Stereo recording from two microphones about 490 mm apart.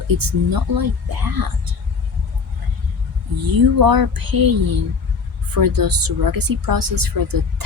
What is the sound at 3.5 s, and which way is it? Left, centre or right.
Speech, right.